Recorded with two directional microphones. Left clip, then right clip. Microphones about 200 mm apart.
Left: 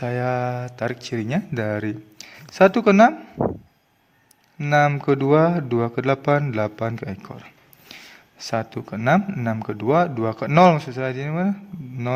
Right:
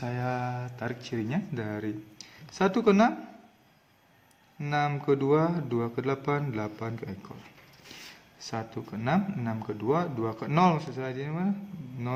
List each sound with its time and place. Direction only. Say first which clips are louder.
0.0 s speech: left 9 dB; 40° left (ahead or behind)
4.5 s speech: left 11 dB; 40° left (ahead or behind)
8.4 s speech: left 10 dB; 45° left (ahead or behind)